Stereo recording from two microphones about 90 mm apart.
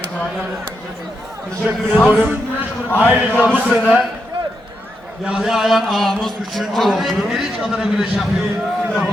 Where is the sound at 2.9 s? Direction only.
20° left (ahead or behind).